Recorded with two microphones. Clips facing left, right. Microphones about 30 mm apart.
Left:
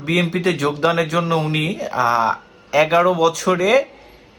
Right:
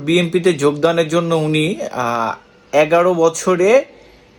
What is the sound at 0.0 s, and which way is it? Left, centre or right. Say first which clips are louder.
A man's voice: right 4 dB; left.